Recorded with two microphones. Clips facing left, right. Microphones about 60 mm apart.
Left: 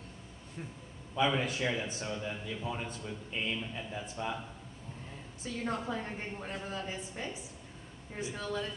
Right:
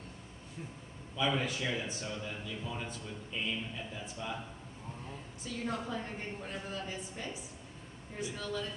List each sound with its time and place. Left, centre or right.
1.1 s a man's voice: left
5.4 s a man's voice: left